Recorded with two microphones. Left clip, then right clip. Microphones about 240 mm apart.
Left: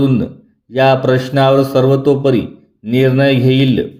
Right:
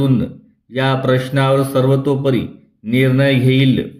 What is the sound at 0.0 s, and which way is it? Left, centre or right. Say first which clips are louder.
A man's voice: left 3 dB; centre.